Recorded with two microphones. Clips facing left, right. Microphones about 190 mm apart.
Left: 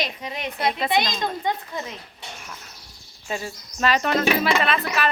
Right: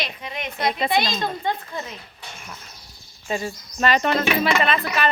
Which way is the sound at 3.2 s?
Centre (ahead or behind).